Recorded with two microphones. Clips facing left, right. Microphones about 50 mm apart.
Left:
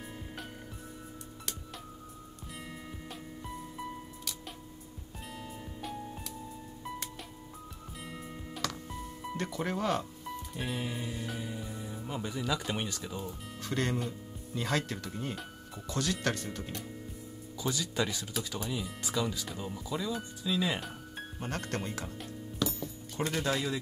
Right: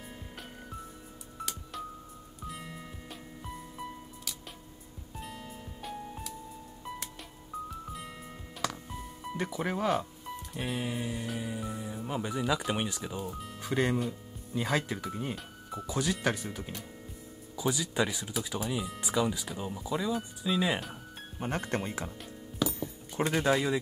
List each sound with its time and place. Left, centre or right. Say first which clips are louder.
0.0 s music: left 2 dB; centre
2.4 s music: right 3 dB; centre
4.2 s music: left 1 dB; centre
7.9 s music: right 1 dB; centre
9.4 s speech: right 2 dB; centre
13.2 s speech: right 3 dB; centre
13.6 s speech: right 4 dB; centre
22.6 s a sound: right 2 dB; centre